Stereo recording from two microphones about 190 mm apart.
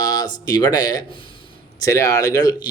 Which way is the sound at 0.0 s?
20° left (ahead or behind).